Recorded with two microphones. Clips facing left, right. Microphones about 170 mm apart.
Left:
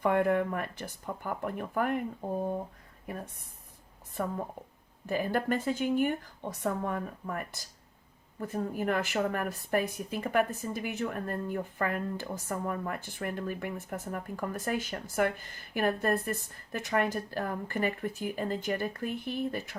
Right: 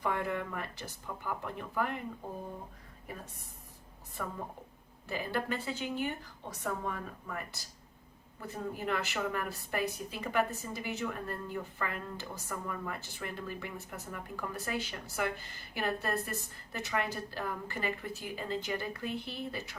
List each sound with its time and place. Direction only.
0.0 s a woman's voice: 55° left (ahead or behind)
5.0 s a woman's voice: 50° left (ahead or behind)